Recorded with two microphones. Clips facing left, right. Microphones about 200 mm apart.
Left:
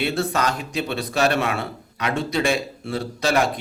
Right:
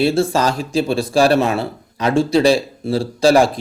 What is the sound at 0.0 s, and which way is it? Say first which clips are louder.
Speech: right 7 dB; 30° right (ahead or behind).